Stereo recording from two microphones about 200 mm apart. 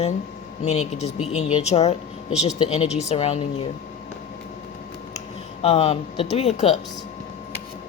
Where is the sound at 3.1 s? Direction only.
30° left (ahead or behind).